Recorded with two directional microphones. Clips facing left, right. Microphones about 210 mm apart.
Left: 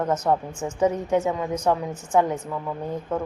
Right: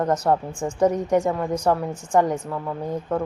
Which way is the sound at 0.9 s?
10° right (ahead or behind).